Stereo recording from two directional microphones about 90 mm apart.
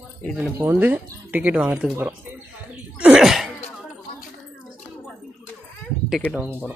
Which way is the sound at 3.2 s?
5° right (ahead or behind).